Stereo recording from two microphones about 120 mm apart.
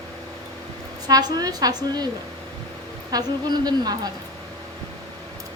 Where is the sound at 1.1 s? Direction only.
35° right (ahead or behind).